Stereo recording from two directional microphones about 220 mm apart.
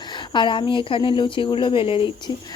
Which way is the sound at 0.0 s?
20° left (ahead or behind).